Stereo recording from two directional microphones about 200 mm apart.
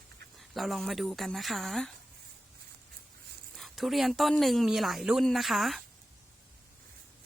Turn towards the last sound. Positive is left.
turn(degrees=0)  # may be behind; listen again after turning